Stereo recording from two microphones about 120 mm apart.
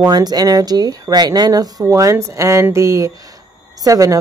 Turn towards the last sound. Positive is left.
turn(degrees=-30)  # may be behind; listen again after turning